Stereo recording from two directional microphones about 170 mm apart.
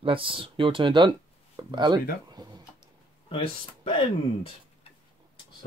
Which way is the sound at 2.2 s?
25° right (ahead or behind).